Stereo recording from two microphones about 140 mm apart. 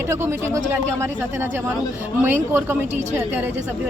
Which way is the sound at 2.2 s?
15° right (ahead or behind).